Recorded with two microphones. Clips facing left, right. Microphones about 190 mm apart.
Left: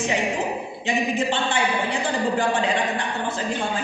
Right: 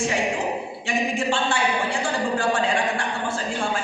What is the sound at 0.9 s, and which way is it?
A woman's voice, 20° left (ahead or behind).